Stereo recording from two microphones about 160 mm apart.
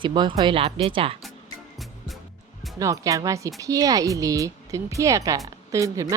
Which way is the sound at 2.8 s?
20° right (ahead or behind).